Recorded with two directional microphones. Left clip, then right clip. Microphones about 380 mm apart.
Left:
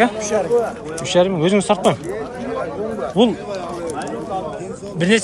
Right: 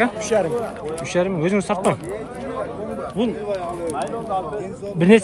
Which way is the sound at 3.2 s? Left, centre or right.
Centre.